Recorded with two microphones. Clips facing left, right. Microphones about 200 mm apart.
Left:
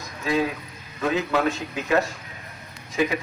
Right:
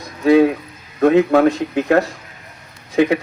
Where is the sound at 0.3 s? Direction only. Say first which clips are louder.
Right 12 dB; 65° right (ahead or behind).